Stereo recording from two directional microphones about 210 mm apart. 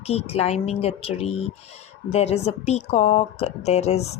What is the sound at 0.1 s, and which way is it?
A woman's voice, 30° left (ahead or behind).